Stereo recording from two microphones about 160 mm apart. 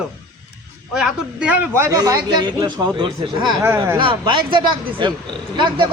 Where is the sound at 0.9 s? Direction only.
5° right (ahead or behind); by 3.5 s 30° right (ahead or behind).